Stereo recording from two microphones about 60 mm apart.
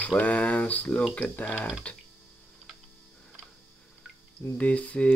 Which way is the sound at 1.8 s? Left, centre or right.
Left.